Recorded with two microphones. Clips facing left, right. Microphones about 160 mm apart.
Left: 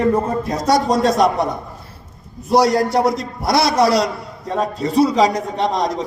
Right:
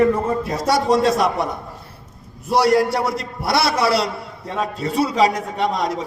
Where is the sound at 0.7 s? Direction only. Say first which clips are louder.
Left 1 dB; 40° left (ahead or behind).